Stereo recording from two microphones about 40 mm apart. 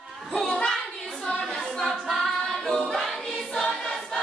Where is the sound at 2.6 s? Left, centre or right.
Centre.